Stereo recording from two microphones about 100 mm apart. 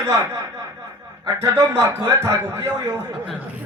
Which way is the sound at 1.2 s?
30° right (ahead or behind).